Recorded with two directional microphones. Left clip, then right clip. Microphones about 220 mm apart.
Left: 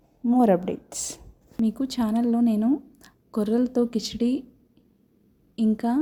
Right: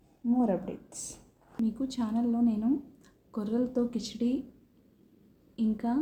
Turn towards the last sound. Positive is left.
turn(degrees=35)  # may be behind; listen again after turning